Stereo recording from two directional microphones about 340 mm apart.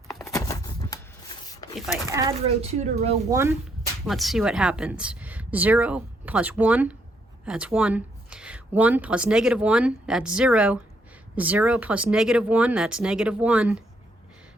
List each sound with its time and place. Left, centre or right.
0.1 s a sound: centre
1.9 s speech: centre
3.3 s a woman's voice: centre